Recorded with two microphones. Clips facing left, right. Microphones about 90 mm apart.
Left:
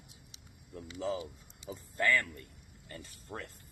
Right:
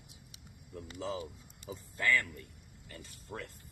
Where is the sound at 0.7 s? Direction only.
40° right (ahead or behind).